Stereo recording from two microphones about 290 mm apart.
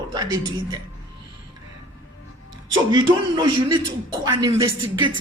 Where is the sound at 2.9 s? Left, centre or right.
Centre.